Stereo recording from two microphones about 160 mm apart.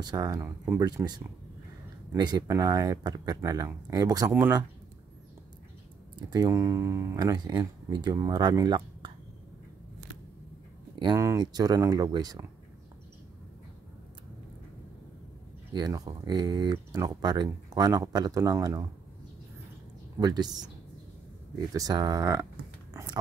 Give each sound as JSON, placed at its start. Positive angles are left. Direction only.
{"t": 0.0, "sound": "speech", "side_deg": -25}
{"t": 4.3, "sound": "speech", "side_deg": -15}
{"t": 6.1, "sound": "speech", "side_deg": -25}
{"t": 11.1, "sound": "speech", "side_deg": -20}
{"t": 15.7, "sound": "speech", "side_deg": -25}
{"t": 20.2, "sound": "speech", "side_deg": -25}
{"t": 21.7, "sound": "speech", "side_deg": -25}